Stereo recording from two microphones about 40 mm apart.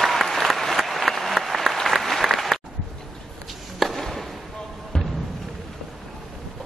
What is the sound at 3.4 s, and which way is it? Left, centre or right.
Chop, centre.